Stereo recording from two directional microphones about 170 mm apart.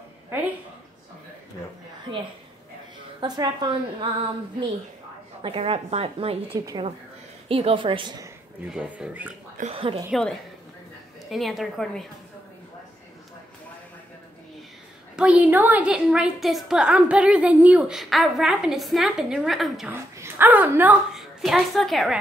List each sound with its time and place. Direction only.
3.2 s a woman's voice: 25° right (ahead or behind)
5.4 s a woman's voice: 35° right (ahead or behind)
8.6 s speech: 5° right (ahead or behind)
9.6 s a woman's voice: 35° right (ahead or behind)
10.1 s a woman's voice: centre (ahead or behind)
15.1 s a woman's voice: 10° right (ahead or behind)
19.9 s a woman's voice: 10° right (ahead or behind)